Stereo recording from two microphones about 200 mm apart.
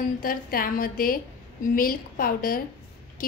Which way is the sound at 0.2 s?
45° left (ahead or behind).